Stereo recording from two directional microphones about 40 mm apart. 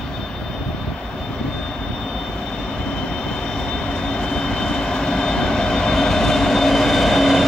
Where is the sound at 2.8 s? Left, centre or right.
Left.